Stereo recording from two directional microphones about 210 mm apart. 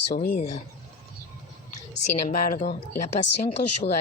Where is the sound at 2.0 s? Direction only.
35° left (ahead or behind).